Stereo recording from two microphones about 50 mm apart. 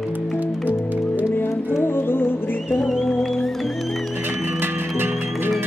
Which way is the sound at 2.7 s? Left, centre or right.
Centre.